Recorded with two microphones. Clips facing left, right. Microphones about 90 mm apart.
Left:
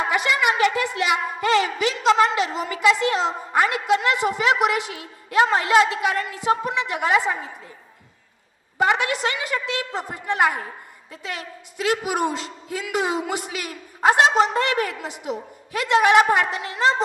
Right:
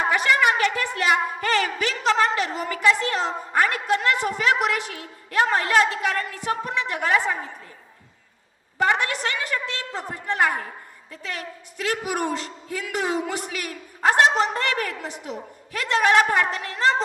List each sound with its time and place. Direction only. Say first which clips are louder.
0.3 s a woman's voice: left 1 dB; 15° left (ahead or behind)
8.8 s a man's voice: left 2 dB; 15° left (ahead or behind)